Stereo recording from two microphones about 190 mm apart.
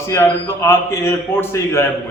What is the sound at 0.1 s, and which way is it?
A man's voice, 15° left (ahead or behind).